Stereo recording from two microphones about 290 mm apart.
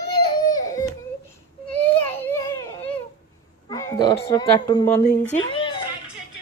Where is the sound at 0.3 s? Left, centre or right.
Centre.